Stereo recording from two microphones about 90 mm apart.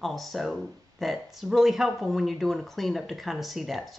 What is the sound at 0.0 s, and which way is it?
Speech, centre (ahead or behind).